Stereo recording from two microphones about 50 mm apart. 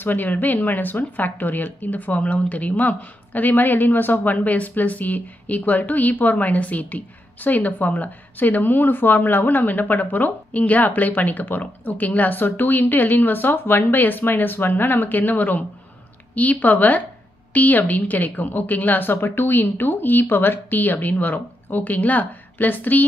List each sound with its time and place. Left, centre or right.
0.0 s a woman's voice: left